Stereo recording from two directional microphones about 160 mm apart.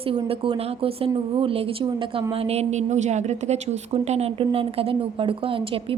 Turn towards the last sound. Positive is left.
turn(degrees=-35)  # may be behind; listen again after turning